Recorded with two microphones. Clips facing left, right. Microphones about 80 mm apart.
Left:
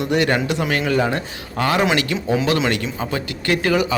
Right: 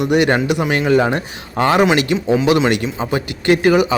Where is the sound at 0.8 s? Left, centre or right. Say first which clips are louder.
Right 6 dB; right.